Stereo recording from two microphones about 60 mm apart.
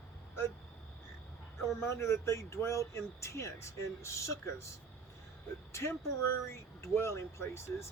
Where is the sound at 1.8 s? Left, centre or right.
Left.